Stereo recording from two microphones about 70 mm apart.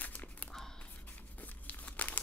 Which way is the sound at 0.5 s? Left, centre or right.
Centre.